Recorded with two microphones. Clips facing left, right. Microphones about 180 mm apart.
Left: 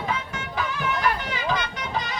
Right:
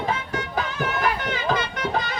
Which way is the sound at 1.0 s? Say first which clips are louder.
Right 2 dB; 50° right (ahead or behind).